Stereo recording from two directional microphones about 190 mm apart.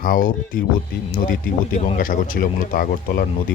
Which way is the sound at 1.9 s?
45° left (ahead or behind).